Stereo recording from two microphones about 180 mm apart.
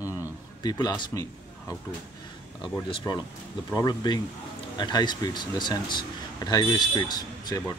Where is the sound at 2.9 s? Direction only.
25° left (ahead or behind).